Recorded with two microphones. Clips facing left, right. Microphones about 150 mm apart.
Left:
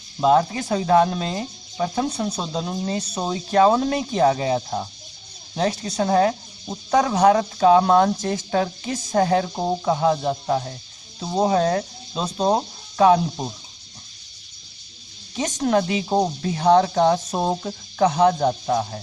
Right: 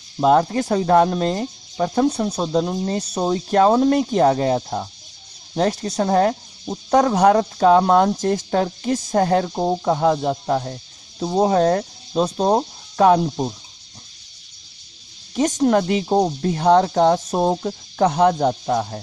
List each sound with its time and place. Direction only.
0.2 s speech: 45° right (ahead or behind)
15.3 s speech: 45° right (ahead or behind)